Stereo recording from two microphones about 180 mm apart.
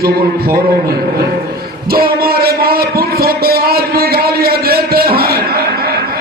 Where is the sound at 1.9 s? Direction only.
55° right (ahead or behind).